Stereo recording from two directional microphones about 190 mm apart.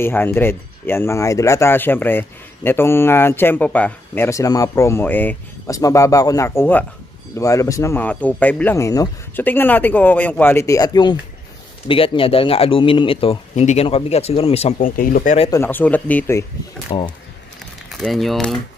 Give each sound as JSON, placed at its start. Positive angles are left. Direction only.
{"t": 0.0, "sound": "speech", "side_deg": 10}
{"t": 14.8, "sound": "speech", "side_deg": 45}
{"t": 15.5, "sound": "speech", "side_deg": 10}
{"t": 16.9, "sound": "speech", "side_deg": 25}
{"t": 17.9, "sound": "speech", "side_deg": 0}